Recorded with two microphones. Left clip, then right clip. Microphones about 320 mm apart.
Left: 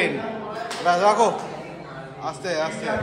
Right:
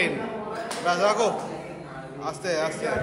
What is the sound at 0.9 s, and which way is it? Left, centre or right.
Speech, centre.